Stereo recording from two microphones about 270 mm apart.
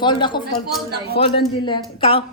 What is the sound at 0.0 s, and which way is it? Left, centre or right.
Speech, centre.